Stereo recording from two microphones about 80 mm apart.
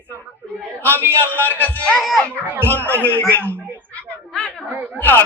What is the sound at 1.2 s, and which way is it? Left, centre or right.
Speech, left.